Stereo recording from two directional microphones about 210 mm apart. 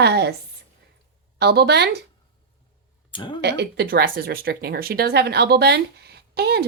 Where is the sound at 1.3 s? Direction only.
50° right (ahead or behind).